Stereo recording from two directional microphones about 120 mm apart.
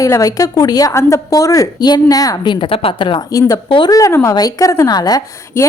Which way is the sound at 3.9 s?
25° left (ahead or behind).